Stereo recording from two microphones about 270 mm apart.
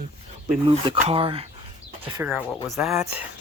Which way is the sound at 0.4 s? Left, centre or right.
Right.